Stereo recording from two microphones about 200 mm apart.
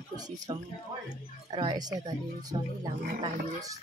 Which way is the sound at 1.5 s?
20° right (ahead or behind).